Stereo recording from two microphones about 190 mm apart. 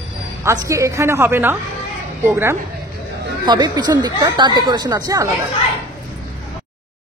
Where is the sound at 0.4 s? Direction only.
15° right (ahead or behind).